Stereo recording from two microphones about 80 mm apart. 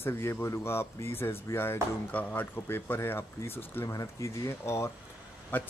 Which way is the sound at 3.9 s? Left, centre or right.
Left.